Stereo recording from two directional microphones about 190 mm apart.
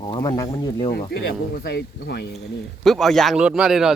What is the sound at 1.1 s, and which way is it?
Speech, 55° left (ahead or behind).